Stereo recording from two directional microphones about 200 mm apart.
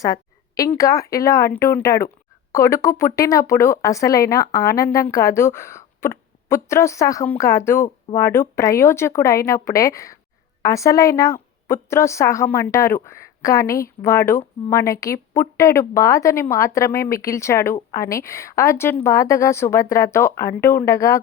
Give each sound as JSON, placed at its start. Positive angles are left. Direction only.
{"t": 0.0, "sound": "speech", "side_deg": 15}